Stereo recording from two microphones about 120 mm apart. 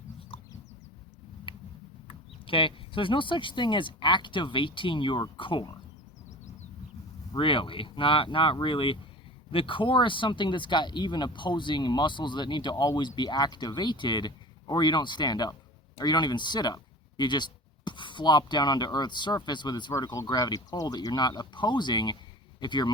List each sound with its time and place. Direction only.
0.3 s chicken: 50° left (ahead or behind)
1.5 s a sound: 45° left (ahead or behind)
2.0 s speech: 45° left (ahead or behind)
7.3 s speech: 45° left (ahead or behind)